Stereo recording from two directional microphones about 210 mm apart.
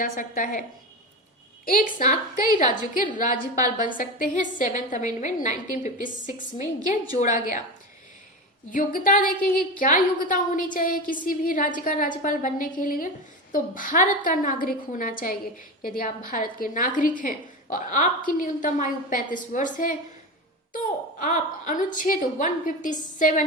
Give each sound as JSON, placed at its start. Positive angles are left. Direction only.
{"t": 0.0, "sound": "a woman's voice", "side_deg": 40}
{"t": 1.6, "sound": "a woman's voice", "side_deg": 40}
{"t": 8.7, "sound": "a woman's voice", "side_deg": 40}